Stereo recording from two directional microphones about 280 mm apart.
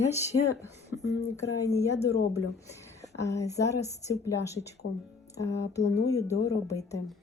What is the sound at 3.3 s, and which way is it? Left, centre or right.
A woman's voice, centre.